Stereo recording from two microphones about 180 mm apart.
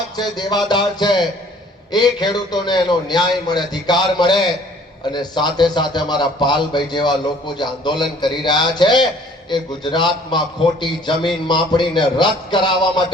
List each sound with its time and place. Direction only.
0.2 s a man's voice: 25° left (ahead or behind)